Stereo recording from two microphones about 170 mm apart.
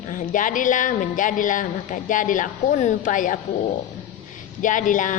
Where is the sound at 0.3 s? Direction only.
50° left (ahead or behind).